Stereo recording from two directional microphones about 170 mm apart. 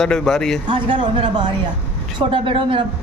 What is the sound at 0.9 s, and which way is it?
Speech, 30° right (ahead or behind).